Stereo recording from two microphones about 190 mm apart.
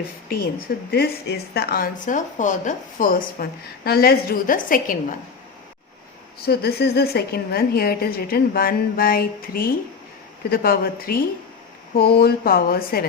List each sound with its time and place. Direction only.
0.9 s speech: 55° left (ahead or behind)
6.4 s a woman's voice: 55° left (ahead or behind)